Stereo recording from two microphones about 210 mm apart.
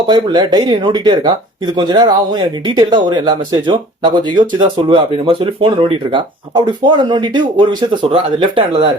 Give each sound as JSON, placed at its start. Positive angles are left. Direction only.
{"t": 0.1, "sound": "speech", "side_deg": -20}